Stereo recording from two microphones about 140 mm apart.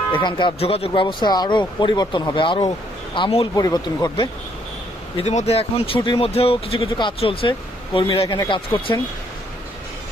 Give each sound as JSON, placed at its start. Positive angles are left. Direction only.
{"t": 0.1, "sound": "speech", "side_deg": 35}
{"t": 5.1, "sound": "speech", "side_deg": 55}